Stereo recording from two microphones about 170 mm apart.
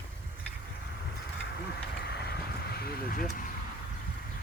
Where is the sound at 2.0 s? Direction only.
75° left (ahead or behind).